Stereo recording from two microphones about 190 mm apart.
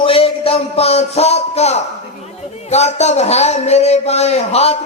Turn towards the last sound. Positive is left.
turn(degrees=35)  # may be behind; listen again after turning